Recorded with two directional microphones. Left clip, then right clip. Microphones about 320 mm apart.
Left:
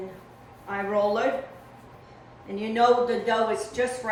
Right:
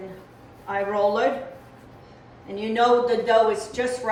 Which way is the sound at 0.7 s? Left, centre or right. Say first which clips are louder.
Right 3 dB; centre.